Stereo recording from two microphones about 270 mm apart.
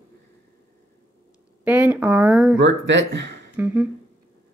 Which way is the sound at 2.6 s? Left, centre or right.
Right.